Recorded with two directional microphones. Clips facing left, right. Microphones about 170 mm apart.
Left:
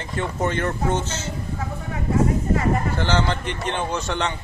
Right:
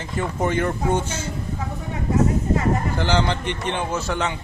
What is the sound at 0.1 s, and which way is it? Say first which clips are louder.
A man's voice: right 1 dB; 10° right (ahead or behind).